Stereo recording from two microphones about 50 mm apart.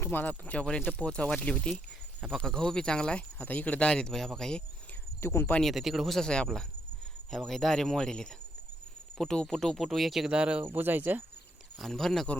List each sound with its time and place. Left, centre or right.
0.1 s speech: left
3.4 s speech: left
3.8 s speech: centre
4.1 s speech: centre
5.2 s speech: left
5.6 s speech: centre
6.2 s speech: left
7.3 s speech: centre
10.2 s speech: centre
10.8 s speech: right
11.8 s speech: centre